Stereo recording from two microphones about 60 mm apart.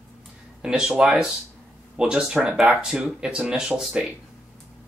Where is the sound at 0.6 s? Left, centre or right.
Centre.